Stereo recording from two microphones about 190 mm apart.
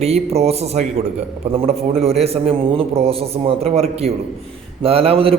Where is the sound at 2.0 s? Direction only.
30° right (ahead or behind).